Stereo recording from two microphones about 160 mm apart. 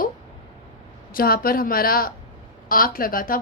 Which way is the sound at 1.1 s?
65° left (ahead or behind).